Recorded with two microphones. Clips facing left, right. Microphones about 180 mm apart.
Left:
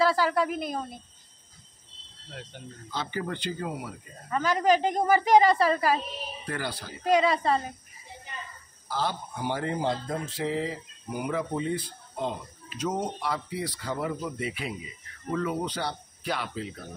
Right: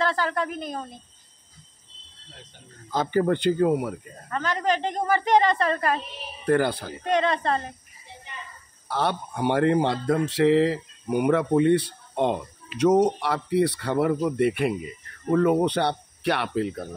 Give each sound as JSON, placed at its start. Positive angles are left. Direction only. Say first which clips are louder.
{"t": 0.0, "sound": "speech", "louder": "left 2 dB", "side_deg": 5}
{"t": 2.9, "sound": "speech", "louder": "right 10 dB", "side_deg": -45}
{"t": 4.3, "sound": "speech", "louder": "left 2 dB", "side_deg": 10}
{"t": 6.4, "sound": "speech", "louder": "right 14 dB", "side_deg": -55}
{"t": 7.1, "sound": "a woman's voice", "louder": "even", "side_deg": 5}
{"t": 8.8, "sound": "speech", "louder": "right 4 dB", "side_deg": -65}